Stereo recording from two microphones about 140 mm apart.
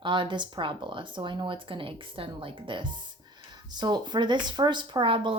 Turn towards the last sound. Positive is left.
turn(degrees=-40)  # may be behind; listen again after turning